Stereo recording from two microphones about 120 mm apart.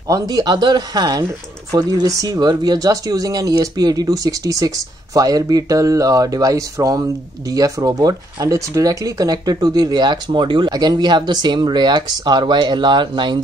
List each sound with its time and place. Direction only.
0.1 s speech: 35° right (ahead or behind)